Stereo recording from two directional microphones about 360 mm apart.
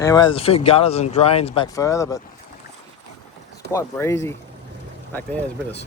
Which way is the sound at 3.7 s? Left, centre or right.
Centre.